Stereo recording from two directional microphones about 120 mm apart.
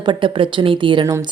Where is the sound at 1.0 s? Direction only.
30° right (ahead or behind).